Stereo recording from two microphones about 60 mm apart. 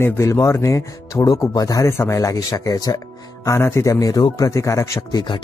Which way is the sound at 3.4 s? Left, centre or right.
Left.